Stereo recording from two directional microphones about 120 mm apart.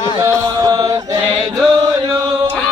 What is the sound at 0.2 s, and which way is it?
Chant, 30° right (ahead or behind).